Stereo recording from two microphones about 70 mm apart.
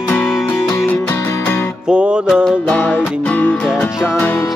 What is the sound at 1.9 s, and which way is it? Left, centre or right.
Music, centre.